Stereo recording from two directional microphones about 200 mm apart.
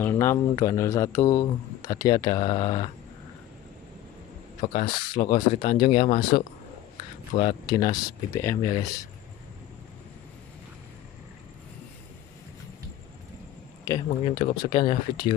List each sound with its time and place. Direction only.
0.0 s speech: 10° left (ahead or behind)
4.6 s speech: 20° left (ahead or behind)
13.9 s speech: 15° left (ahead or behind)
14.2 s speech: 25° left (ahead or behind)